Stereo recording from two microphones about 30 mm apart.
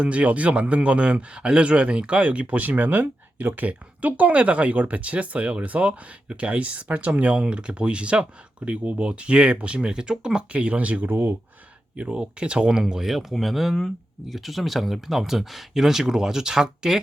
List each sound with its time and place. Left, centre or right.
0.0 s speech: right
2.6 s speech: right
3.7 s speech: right
7.3 s speech: right
10.5 s speech: right
11.9 s speech: right
12.8 s speech: centre
13.3 s speech: centre
15.8 s speech: centre